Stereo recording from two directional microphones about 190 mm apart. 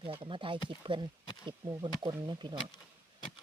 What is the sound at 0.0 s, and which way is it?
Speech, 25° right (ahead or behind).